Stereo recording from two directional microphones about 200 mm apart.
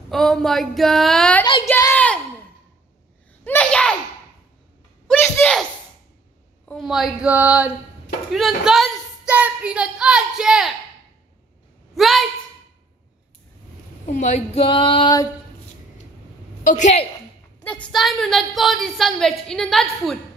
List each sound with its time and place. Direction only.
0.1 s a woman's voice: centre (ahead or behind)
1.7 s a sound: 10° left (ahead or behind)
3.4 s a sound: 5° left (ahead or behind)
5.0 s a sound: 10° left (ahead or behind)
6.7 s speech: centre (ahead or behind)
11.9 s a woman's voice: centre (ahead or behind)
14.0 s speech: 35° left (ahead or behind)
16.6 s a woman's voice: 35° left (ahead or behind)
17.6 s a woman's voice: 5° left (ahead or behind)